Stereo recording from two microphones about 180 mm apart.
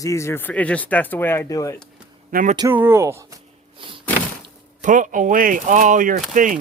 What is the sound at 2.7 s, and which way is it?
Speech, 10° right (ahead or behind).